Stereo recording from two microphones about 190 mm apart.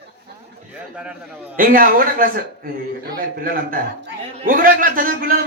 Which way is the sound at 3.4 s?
45° right (ahead or behind).